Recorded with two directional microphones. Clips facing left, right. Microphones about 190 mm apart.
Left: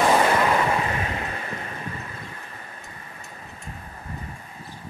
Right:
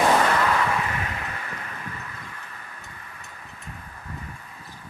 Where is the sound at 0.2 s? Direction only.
25° left (ahead or behind).